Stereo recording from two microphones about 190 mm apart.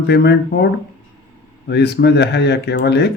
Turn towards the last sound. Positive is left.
turn(degrees=60)  # may be behind; listen again after turning